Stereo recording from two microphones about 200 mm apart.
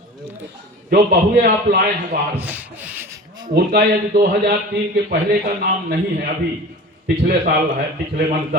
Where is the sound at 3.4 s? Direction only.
55° right (ahead or behind).